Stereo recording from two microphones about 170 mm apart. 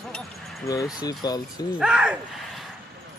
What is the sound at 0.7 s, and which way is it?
Speech, 20° left (ahead or behind).